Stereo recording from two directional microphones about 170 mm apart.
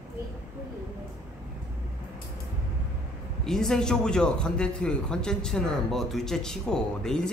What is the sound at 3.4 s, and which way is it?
A man's voice, 5° left (ahead or behind).